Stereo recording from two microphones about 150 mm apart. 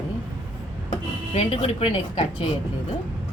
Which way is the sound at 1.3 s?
40° left (ahead or behind).